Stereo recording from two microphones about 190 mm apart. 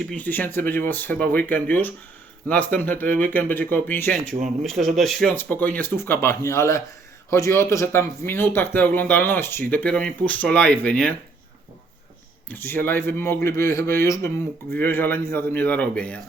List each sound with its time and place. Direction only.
0.0 s speech: 5° left (ahead or behind)
4.3 s speech: 40° right (ahead or behind)
4.6 s speech: centre (ahead or behind)
12.5 s speech: 10° left (ahead or behind)